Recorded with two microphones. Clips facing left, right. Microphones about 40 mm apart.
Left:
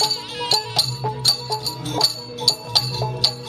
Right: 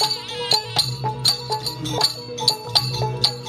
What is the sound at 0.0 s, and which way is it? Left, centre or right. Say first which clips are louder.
Music: even; right.